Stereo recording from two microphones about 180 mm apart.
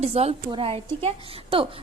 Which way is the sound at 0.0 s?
35° right (ahead or behind).